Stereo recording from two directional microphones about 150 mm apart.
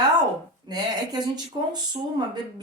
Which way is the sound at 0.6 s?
30° right (ahead or behind).